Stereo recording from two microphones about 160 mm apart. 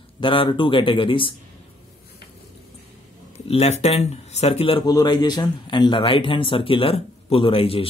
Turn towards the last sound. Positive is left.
turn(degrees=35)  # may be behind; listen again after turning